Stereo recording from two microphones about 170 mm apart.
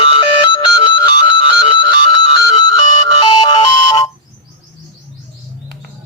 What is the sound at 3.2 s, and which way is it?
Ringtone, 25° left (ahead or behind).